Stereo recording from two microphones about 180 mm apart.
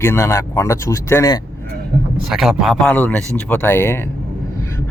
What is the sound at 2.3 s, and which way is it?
Speech, centre (ahead or behind).